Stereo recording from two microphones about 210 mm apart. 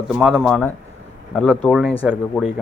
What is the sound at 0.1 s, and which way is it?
Speech, 5° right (ahead or behind).